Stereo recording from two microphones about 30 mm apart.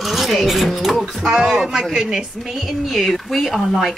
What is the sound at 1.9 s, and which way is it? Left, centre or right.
Speech, right.